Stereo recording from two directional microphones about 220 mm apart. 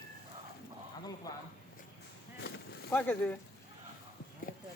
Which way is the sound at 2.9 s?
10° left (ahead or behind).